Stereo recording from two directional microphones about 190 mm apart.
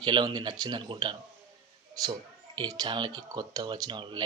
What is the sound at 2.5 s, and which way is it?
Speech, 20° right (ahead or behind).